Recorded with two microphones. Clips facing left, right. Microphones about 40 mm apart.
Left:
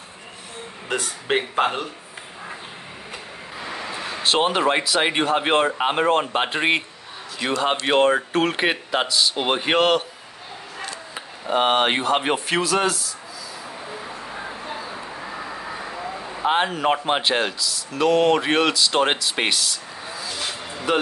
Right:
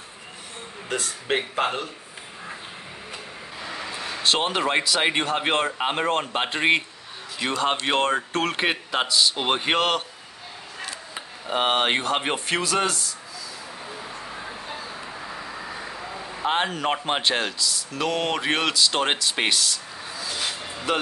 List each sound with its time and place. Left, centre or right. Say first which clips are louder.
0.8 s speech: left 2 dB; centre
3.6 s speech: left 2 dB; centre
14.0 s vehicle: left 3 dB; centre
14.7 s speech: left 3 dB; centre
20.3 s a sound: even; centre